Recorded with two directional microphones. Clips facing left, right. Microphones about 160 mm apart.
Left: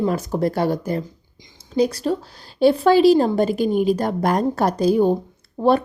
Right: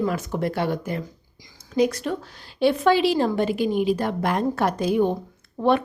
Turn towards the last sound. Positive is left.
turn(degrees=35)  # may be behind; listen again after turning